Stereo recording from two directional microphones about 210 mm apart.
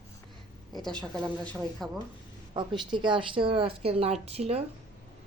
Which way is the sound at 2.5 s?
20° right (ahead or behind).